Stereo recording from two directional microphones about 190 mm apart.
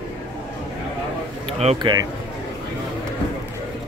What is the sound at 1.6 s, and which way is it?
Speech, 30° right (ahead or behind).